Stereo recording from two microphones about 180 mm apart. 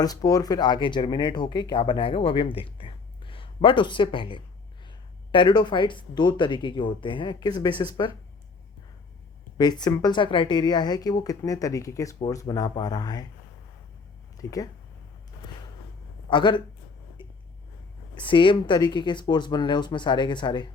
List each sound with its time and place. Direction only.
0.0 s speech: 20° left (ahead or behind)
9.6 s speech: 25° left (ahead or behind)
14.3 s speech: 20° left (ahead or behind)
16.3 s speech: 25° left (ahead or behind)
17.2 s a sound: 25° left (ahead or behind)
18.1 s speech: 25° left (ahead or behind)